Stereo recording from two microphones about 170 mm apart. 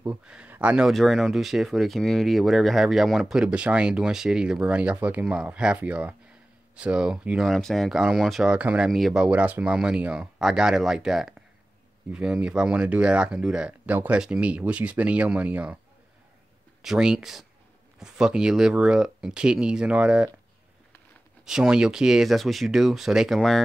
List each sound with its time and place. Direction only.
0.0 s speech: 10° right (ahead or behind)
16.8 s speech: 5° right (ahead or behind)
21.5 s speech: 5° right (ahead or behind)